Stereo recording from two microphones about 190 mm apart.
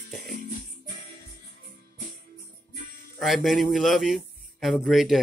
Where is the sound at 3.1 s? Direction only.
Centre (ahead or behind).